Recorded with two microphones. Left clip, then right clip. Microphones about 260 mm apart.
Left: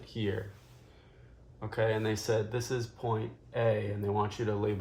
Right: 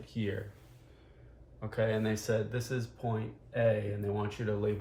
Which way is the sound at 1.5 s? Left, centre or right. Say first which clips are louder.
Left 1 dB; left.